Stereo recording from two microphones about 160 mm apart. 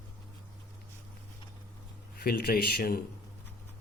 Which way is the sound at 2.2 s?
70° left (ahead or behind).